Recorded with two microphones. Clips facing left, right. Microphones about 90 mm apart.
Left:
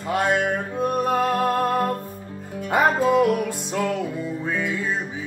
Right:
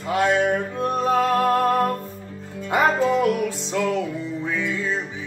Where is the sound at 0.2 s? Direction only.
15° left (ahead or behind).